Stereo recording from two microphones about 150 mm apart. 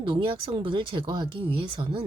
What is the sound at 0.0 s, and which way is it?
Speech, 30° right (ahead or behind).